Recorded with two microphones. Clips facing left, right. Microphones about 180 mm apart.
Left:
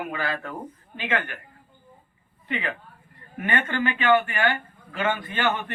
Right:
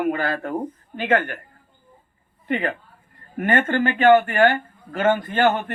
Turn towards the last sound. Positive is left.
turn(degrees=-45)  # may be behind; listen again after turning